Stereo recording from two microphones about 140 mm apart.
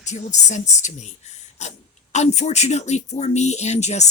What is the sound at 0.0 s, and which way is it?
Speech, 55° left (ahead or behind).